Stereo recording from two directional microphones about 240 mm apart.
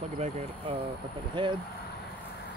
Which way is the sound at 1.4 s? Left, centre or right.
Centre.